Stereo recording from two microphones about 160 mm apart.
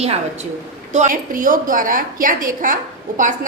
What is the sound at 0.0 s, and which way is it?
Speech, 40° right (ahead or behind).